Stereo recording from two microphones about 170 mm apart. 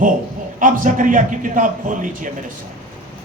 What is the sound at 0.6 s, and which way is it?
Speech, 50° right (ahead or behind).